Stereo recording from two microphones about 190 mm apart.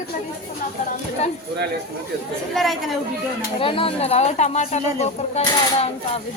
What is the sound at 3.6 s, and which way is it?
Speech, 30° left (ahead or behind).